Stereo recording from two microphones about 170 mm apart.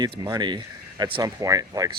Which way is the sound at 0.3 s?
25° right (ahead or behind).